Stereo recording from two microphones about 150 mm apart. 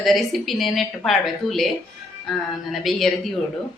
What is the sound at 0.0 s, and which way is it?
Speech, centre (ahead or behind).